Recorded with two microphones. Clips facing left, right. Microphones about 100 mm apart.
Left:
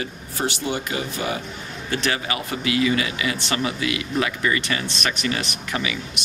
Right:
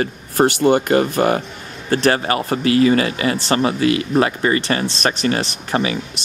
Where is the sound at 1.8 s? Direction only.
40° right (ahead or behind).